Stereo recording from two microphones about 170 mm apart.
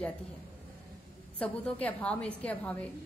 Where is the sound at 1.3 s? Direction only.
5° left (ahead or behind).